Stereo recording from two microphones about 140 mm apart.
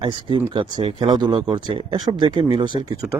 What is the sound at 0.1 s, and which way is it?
Speech, 35° right (ahead or behind).